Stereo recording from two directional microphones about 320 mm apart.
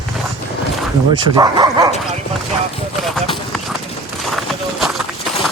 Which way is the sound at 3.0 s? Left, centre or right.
Centre.